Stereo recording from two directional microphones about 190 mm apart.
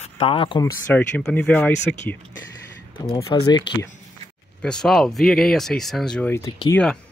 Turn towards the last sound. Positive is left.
turn(degrees=20)  # may be behind; listen again after turning